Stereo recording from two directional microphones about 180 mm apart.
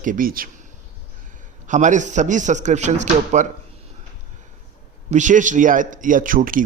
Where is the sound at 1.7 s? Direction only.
45° right (ahead or behind).